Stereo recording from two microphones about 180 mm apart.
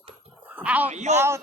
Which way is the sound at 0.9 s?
40° right (ahead or behind).